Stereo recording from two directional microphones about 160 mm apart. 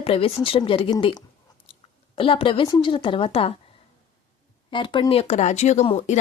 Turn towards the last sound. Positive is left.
turn(degrees=45)  # may be behind; listen again after turning